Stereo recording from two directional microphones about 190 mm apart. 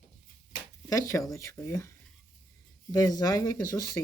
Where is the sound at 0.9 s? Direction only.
15° left (ahead or behind).